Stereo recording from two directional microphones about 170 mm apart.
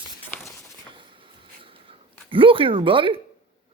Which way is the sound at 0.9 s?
30° right (ahead or behind).